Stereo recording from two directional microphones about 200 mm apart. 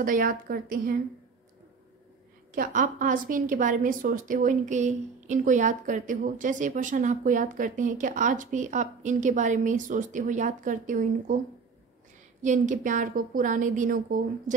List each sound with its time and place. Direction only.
0.0 s a woman's voice: 45° right (ahead or behind)
2.5 s a woman's voice: 40° right (ahead or behind)
12.4 s a woman's voice: 40° right (ahead or behind)